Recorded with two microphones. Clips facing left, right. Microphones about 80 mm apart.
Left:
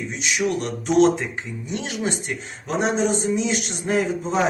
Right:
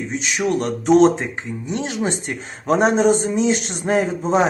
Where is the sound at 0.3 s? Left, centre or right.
Right.